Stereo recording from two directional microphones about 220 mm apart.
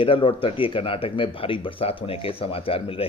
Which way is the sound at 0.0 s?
25° left (ahead or behind).